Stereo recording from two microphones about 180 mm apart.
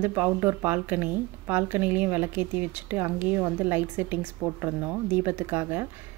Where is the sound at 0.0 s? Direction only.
15° right (ahead or behind).